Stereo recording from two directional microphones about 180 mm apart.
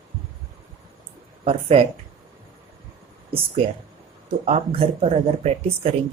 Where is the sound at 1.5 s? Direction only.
35° right (ahead or behind).